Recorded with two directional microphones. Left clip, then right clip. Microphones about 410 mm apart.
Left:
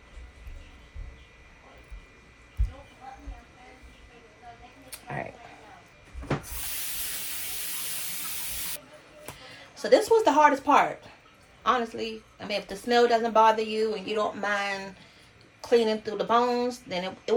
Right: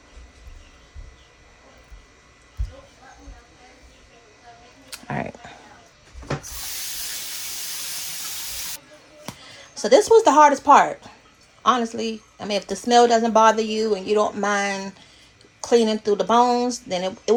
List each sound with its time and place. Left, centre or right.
4.9 s music: right
9.7 s speech: centre